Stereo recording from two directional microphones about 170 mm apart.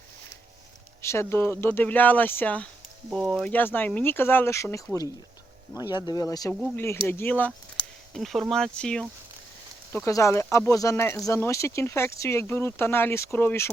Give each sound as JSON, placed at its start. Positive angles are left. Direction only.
{"t": 1.0, "sound": "speech", "side_deg": 15}
{"t": 9.9, "sound": "speech", "side_deg": 15}